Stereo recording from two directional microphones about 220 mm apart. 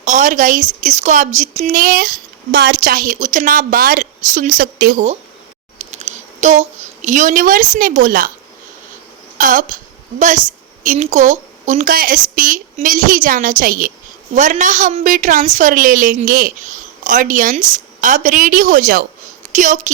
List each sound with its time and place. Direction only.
0.0 s a woman's voice: 35° right (ahead or behind)
9.4 s a woman's voice: 35° right (ahead or behind)